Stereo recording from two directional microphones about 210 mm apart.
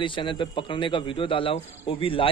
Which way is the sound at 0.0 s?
20° left (ahead or behind).